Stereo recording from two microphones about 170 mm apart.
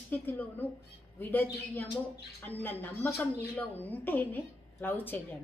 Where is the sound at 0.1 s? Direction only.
10° left (ahead or behind).